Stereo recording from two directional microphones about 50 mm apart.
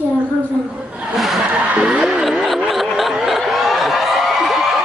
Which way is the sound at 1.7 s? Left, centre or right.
Centre.